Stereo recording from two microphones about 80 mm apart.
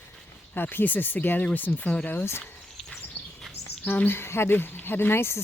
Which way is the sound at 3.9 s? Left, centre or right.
Left.